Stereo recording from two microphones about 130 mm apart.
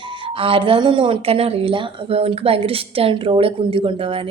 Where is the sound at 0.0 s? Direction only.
40° right (ahead or behind).